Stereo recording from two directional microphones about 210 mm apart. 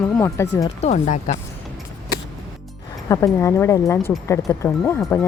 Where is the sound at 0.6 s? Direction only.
30° left (ahead or behind).